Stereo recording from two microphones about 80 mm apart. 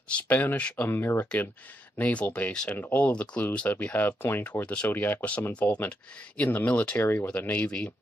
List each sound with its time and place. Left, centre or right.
0.3 s speech: left